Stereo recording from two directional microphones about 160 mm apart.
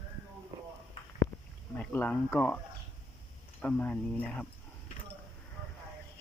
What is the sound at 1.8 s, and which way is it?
Speech, 10° left (ahead or behind).